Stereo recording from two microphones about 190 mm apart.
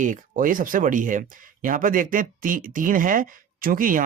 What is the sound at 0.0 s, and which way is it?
Speech, 45° right (ahead or behind).